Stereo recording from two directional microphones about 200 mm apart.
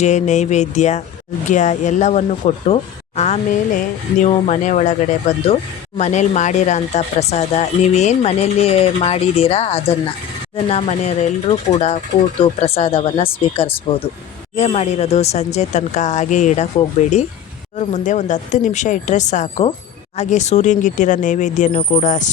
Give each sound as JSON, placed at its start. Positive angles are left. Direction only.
{"t": 0.0, "sound": "speech", "side_deg": 35}
{"t": 17.7, "sound": "speech", "side_deg": 35}